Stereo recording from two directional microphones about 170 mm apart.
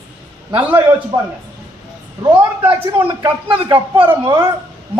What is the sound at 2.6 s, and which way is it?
Speech, 10° right (ahead or behind).